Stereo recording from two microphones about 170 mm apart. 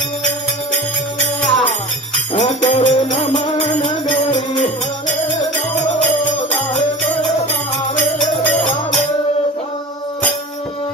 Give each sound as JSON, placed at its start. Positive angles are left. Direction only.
{"t": 1.4, "sound": "jingle bell", "side_deg": 5}
{"t": 2.3, "sound": "music", "side_deg": 45}